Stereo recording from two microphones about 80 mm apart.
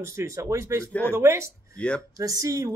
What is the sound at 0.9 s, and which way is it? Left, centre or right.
Speech, left.